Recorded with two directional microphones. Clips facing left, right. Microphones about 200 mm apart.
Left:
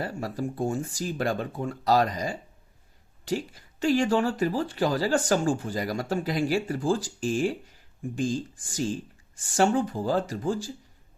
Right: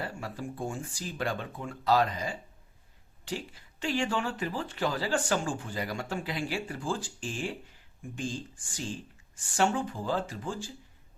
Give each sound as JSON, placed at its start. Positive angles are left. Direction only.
{"t": 0.0, "sound": "speech", "side_deg": 40}